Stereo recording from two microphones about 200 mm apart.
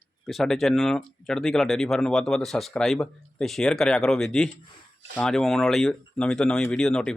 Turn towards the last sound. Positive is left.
turn(degrees=5)  # may be behind; listen again after turning